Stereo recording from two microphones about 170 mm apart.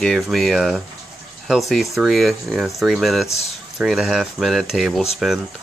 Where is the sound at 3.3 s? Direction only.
40° left (ahead or behind).